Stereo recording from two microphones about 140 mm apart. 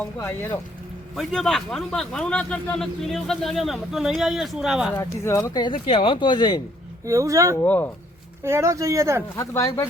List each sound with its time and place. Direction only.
0.0 s speech: 15° left (ahead or behind)
1.1 s speech: centre (ahead or behind)
4.9 s speech: 20° left (ahead or behind)
5.6 s speech: 40° left (ahead or behind)
7.0 s speech: 25° right (ahead or behind)
7.5 s speech: 15° left (ahead or behind)
8.4 s speech: 20° right (ahead or behind)
9.3 s speech: 20° left (ahead or behind)